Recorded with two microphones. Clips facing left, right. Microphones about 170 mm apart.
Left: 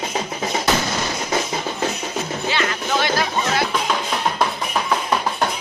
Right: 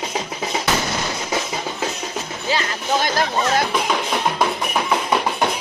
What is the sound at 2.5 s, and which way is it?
Music, 40° right (ahead or behind).